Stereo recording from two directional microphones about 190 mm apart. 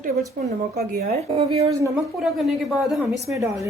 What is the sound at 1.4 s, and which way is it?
Speech, 35° right (ahead or behind).